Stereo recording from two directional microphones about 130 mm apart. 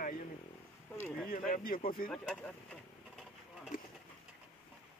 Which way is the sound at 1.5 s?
90° left.